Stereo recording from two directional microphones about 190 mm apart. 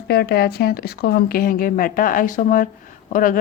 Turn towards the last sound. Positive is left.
turn(degrees=45)  # may be behind; listen again after turning